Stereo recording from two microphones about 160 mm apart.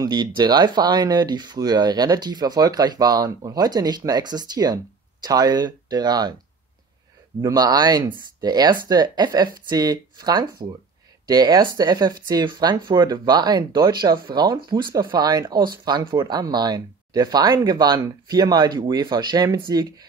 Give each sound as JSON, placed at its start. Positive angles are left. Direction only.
{"t": 0.0, "sound": "speech", "side_deg": -25}
{"t": 7.4, "sound": "speech", "side_deg": -25}